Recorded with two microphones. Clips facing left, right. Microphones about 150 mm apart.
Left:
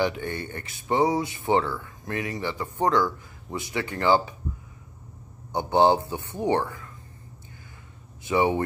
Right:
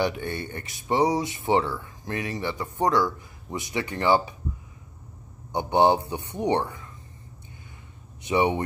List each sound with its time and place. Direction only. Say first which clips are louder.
0.3 s speech: even; 20° right (ahead or behind)
2.4 s speech: even; 15° right (ahead or behind)
5.5 s speech: even; 15° right (ahead or behind)
8.2 s speech: even; 20° right (ahead or behind)